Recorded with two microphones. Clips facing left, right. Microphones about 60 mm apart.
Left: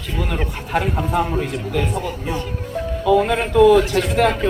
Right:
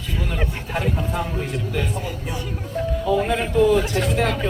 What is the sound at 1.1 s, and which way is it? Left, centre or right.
Speech, left.